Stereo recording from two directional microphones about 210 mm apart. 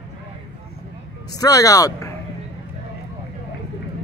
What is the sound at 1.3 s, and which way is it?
Speech, 15° left (ahead or behind).